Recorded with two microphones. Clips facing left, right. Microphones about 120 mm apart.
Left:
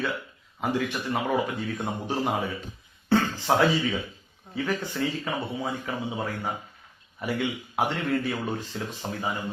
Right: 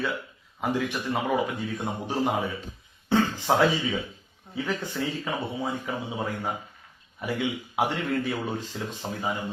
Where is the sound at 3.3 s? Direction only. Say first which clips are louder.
Even; 15° right (ahead or behind).